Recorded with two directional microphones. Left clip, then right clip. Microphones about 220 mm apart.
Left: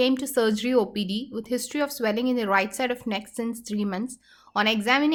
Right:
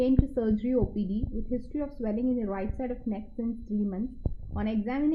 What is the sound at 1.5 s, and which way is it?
A woman's voice, 20° left (ahead or behind).